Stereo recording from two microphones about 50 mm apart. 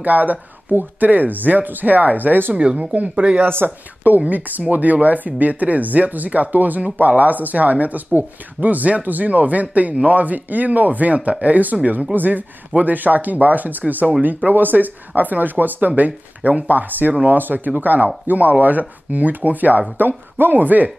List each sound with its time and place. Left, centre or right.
0.0 s speech: right
2.8 s speech: right
3.4 s speech: right